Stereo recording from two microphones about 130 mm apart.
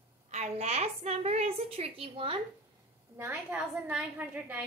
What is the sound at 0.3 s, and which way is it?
A woman's voice, 55° right (ahead or behind).